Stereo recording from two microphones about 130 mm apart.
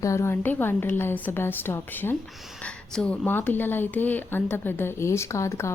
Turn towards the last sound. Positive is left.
turn(degrees=20)  # may be behind; listen again after turning